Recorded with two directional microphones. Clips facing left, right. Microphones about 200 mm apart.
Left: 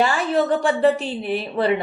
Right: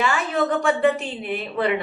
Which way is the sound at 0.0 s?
35° left (ahead or behind).